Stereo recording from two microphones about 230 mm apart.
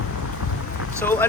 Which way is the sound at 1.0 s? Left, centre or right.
Centre.